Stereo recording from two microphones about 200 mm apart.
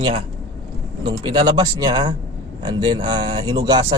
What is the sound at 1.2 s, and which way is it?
A man's voice, 25° right (ahead or behind).